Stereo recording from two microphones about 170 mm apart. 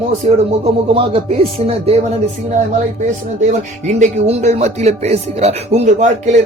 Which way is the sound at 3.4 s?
45° right (ahead or behind).